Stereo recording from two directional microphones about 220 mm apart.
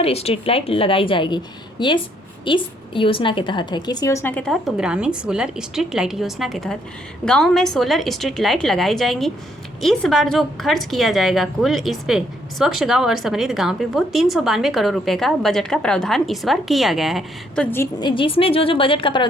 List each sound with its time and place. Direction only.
0.0 s a woman's voice: 30° left (ahead or behind); by 18.1 s 10° left (ahead or behind)
18.1 s a woman's voice: 25° left (ahead or behind)